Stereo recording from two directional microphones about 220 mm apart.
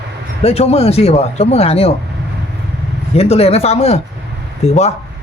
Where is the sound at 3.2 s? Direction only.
25° left (ahead or behind).